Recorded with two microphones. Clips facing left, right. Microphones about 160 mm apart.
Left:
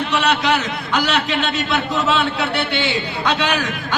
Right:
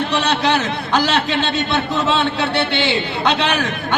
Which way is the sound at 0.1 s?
35° right (ahead or behind).